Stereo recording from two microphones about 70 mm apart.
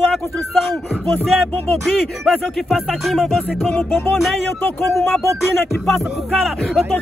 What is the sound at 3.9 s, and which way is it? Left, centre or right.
Music, left.